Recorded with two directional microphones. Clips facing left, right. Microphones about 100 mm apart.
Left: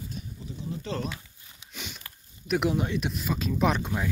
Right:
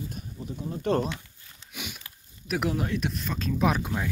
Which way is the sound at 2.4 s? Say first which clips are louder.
Left 2 dB; centre (ahead or behind).